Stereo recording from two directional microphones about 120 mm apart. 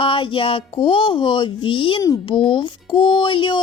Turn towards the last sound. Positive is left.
turn(degrees=45)  # may be behind; listen again after turning